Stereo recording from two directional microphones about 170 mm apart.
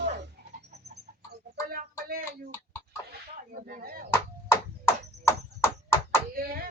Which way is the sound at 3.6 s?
60° right (ahead or behind).